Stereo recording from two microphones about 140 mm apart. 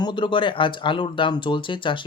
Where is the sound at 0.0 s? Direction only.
35° left (ahead or behind).